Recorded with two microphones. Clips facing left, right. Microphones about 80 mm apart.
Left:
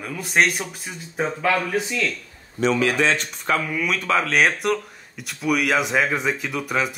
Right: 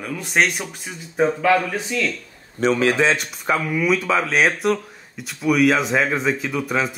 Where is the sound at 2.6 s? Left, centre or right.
Right.